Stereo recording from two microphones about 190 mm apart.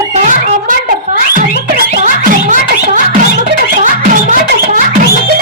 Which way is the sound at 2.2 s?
45° right (ahead or behind).